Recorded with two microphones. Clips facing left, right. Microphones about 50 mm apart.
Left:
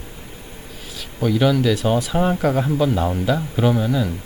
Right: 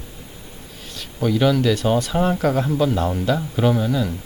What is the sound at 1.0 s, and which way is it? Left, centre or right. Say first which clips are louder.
Speech: even; centre.